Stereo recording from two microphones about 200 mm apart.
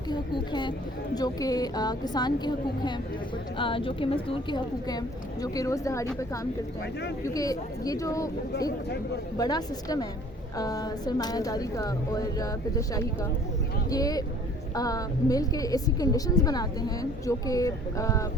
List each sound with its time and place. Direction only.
0.1 s a woman's voice: 20° left (ahead or behind)
9.4 s a woman's voice: 20° left (ahead or behind)